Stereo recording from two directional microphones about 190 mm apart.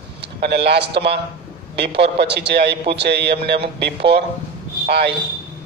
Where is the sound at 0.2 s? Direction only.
65° right (ahead or behind).